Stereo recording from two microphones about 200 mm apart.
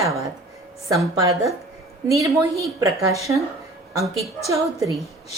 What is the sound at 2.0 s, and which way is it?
A woman's voice, 15° right (ahead or behind).